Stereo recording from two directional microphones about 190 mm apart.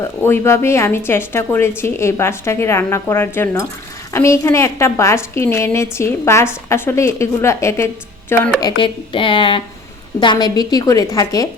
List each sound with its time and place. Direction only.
0.3 s a woman's voice: 15° left (ahead or behind)
8.8 s a woman's voice: 25° left (ahead or behind)